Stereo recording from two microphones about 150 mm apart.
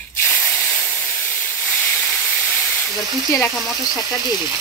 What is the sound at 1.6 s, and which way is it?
Hiss, 10° left (ahead or behind).